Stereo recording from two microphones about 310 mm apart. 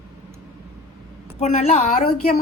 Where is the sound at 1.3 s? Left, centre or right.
Left.